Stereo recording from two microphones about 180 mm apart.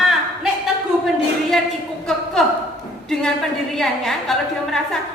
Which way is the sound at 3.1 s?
Centre (ahead or behind).